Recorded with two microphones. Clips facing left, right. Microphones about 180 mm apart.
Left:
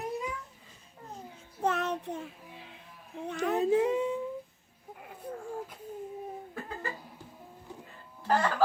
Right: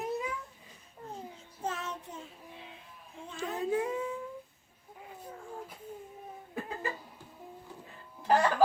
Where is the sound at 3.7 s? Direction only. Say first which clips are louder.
Left 4 dB; 20° left (ahead or behind).